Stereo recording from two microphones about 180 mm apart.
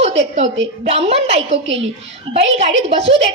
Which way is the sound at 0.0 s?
35° right (ahead or behind).